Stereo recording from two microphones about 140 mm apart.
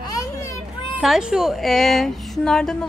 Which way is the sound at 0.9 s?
5° right (ahead or behind).